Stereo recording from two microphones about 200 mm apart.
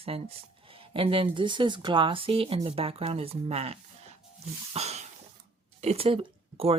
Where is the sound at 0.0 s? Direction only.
30° right (ahead or behind).